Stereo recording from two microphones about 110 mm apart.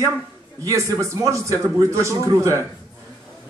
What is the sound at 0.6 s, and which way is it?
Speech, 30° right (ahead or behind).